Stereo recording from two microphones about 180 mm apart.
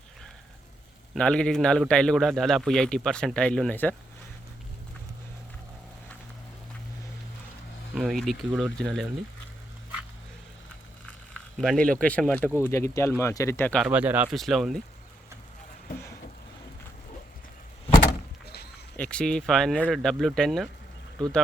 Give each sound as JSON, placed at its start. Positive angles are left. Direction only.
{"t": 1.1, "sound": "a man's voice", "side_deg": 5}
{"t": 7.9, "sound": "a man's voice", "side_deg": 0}
{"t": 11.5, "sound": "speech", "side_deg": 5}
{"t": 13.7, "sound": "a man's voice", "side_deg": -5}
{"t": 18.4, "sound": "a sound", "side_deg": 65}
{"t": 18.9, "sound": "a man's voice", "side_deg": 5}